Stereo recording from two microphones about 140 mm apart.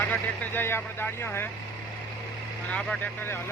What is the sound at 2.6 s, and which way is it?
Speech, 5° left (ahead or behind).